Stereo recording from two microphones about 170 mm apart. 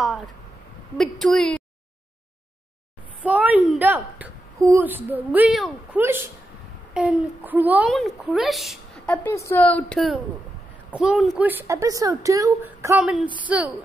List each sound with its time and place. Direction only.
0.0 s a sound: centre (ahead or behind)
1.2 s a woman's voice: 5° left (ahead or behind)
3.2 s a woman's voice: 10° right (ahead or behind)
13.0 s a woman's voice: 5° right (ahead or behind)